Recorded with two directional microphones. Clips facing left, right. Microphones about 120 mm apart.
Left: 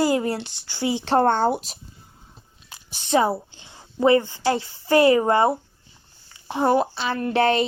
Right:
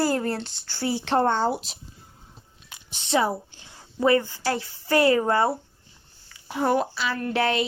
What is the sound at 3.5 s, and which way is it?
A woman's voice, 25° left (ahead or behind).